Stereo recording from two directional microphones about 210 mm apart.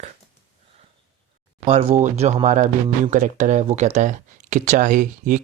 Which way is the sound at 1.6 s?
30° right (ahead or behind).